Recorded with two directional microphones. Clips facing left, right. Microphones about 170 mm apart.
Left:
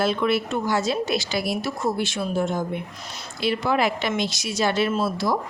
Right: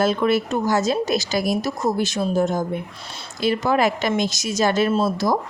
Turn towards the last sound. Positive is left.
turn(degrees=-45)  # may be behind; listen again after turning